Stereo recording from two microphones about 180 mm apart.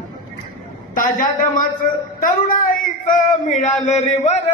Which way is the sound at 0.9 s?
50° left (ahead or behind).